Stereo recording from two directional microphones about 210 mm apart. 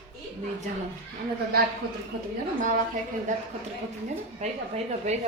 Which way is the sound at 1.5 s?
45° right (ahead or behind).